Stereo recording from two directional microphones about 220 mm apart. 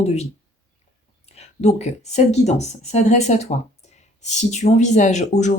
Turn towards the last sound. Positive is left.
turn(degrees=35)  # may be behind; listen again after turning